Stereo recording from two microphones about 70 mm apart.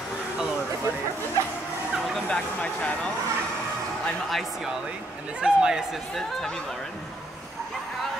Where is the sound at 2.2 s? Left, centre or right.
Centre.